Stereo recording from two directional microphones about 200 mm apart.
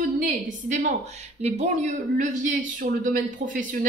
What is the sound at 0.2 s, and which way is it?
A woman's voice, 40° right (ahead or behind).